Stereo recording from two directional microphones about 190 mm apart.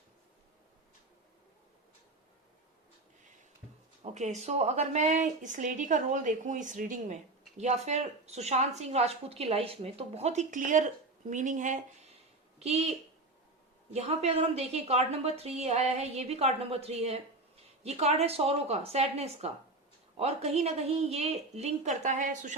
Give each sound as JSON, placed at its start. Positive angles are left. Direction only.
{"t": 4.0, "sound": "speech", "side_deg": -35}
{"t": 13.9, "sound": "speech", "side_deg": -35}